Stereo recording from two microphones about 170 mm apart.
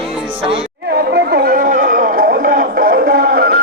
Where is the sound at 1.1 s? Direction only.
65° right (ahead or behind).